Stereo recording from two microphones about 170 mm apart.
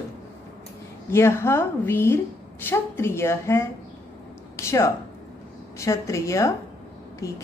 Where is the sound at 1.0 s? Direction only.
15° left (ahead or behind).